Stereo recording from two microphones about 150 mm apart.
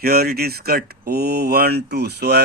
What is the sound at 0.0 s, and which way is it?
Speech, 90° right.